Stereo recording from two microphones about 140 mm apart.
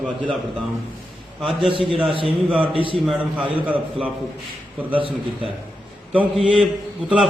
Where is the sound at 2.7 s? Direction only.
40° right (ahead or behind).